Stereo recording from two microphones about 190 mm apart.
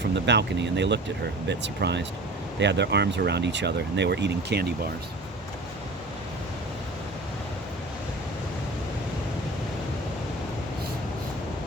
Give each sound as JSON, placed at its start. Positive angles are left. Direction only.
{"t": 0.1, "sound": "speech", "side_deg": -65}